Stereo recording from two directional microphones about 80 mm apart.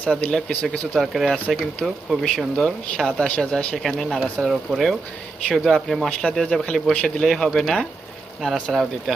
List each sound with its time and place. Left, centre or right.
0.0 s speech: centre
0.9 s speech: centre
3.8 s speech: centre
9.1 s speech: centre